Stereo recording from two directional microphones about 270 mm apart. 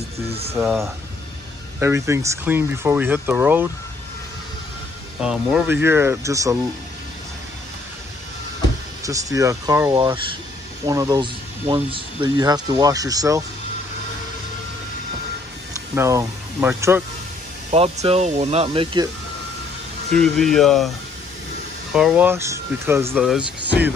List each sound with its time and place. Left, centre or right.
0.3 s speech: right
0.6 s speech: centre
5.2 s speech: centre
9.0 s speech: centre
15.9 s speech: centre
17.6 s speech: right
20.1 s speech: centre
21.9 s speech: centre